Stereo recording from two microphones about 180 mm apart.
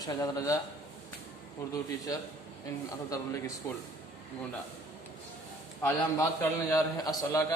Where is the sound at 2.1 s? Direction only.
20° left (ahead or behind).